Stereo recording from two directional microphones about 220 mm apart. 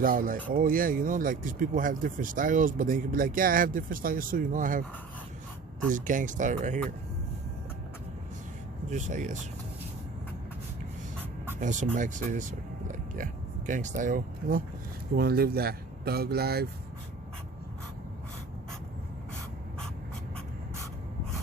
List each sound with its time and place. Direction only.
0.0 s speech: 40° right (ahead or behind)
5.9 s speech: 35° right (ahead or behind)
8.9 s speech: 35° right (ahead or behind)
11.6 s speech: 35° right (ahead or behind)